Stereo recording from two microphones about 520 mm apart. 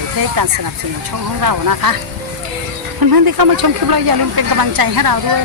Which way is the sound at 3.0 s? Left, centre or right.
Right.